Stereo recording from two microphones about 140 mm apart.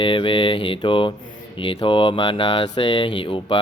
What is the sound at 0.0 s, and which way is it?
Mantra, 35° left (ahead or behind).